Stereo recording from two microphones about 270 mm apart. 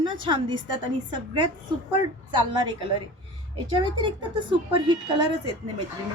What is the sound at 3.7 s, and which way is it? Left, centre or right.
Speech, centre.